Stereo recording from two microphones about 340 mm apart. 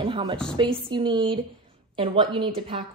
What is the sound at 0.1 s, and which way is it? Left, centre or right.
A woman's voice, centre.